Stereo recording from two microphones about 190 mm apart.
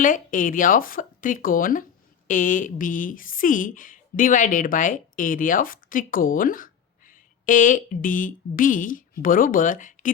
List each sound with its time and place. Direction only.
0.0 s speech: 45° left (ahead or behind)